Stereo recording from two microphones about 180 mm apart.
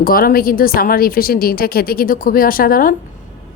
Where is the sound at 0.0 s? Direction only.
55° left (ahead or behind).